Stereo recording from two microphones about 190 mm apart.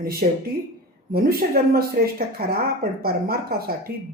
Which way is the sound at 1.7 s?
50° right (ahead or behind).